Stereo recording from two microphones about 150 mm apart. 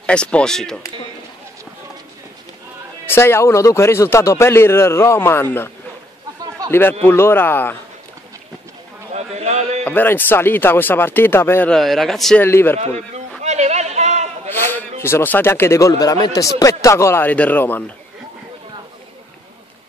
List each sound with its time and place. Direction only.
0.0 s a man's voice: 5° left (ahead or behind)
3.1 s a man's voice: 15° left (ahead or behind)
6.7 s a man's voice: 15° left (ahead or behind)
9.1 s a sound: 45° right (ahead or behind)
9.8 s a man's voice: 15° left (ahead or behind)
11.7 s a man's voice: centre (ahead or behind)
12.4 s a man's voice: 15° left (ahead or behind)
12.8 s a man's voice: 45° right (ahead or behind)
13.4 s a sound: 50° right (ahead or behind)
14.5 s a man's voice: 15° left (ahead or behind)